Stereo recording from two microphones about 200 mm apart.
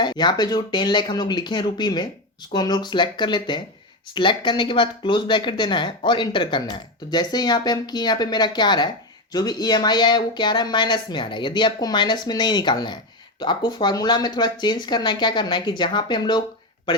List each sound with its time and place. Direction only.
0.0 s speech: 20° left (ahead or behind)